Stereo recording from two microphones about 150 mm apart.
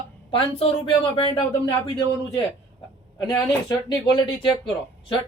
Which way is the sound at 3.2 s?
30° left (ahead or behind).